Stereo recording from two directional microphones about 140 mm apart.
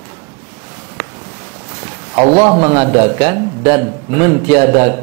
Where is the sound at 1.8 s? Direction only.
20° right (ahead or behind).